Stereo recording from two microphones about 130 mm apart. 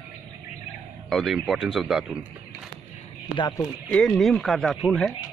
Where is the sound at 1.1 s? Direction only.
Centre (ahead or behind).